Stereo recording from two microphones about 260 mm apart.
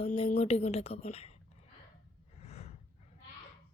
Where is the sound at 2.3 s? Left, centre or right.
Left.